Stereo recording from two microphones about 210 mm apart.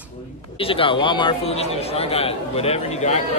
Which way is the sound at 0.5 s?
25° left (ahead or behind).